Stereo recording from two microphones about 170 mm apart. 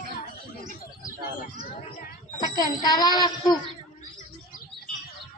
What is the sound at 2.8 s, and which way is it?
Speech, 25° left (ahead or behind).